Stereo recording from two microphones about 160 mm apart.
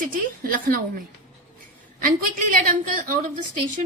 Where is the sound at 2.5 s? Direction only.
60° right (ahead or behind).